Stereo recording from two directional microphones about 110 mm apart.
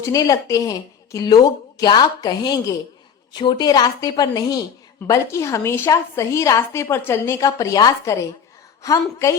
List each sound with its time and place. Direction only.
0.0 s a woman's voice: 30° left (ahead or behind)